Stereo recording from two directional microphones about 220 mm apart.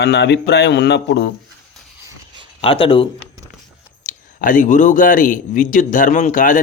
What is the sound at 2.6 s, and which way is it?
Speech, 25° left (ahead or behind).